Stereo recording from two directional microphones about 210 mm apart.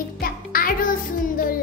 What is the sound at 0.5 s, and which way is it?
Music, 45° left (ahead or behind).